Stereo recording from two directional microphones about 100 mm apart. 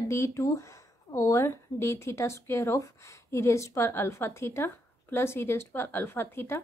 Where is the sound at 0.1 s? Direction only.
30° left (ahead or behind).